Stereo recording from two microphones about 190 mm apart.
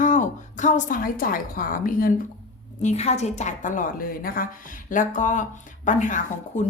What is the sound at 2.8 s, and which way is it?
A woman's voice, 35° left (ahead or behind).